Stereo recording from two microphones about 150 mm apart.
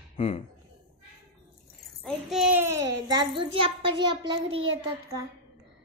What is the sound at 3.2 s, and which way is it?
A child's voice, 35° right (ahead or behind).